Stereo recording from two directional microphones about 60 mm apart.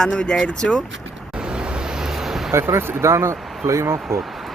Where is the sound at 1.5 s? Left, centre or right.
Centre.